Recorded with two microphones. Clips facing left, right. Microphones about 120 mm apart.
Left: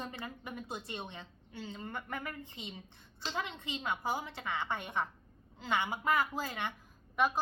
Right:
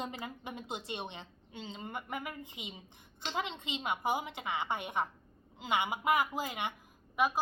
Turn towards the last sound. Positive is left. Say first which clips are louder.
# even
turn(degrees=-5)  # may be behind; listen again after turning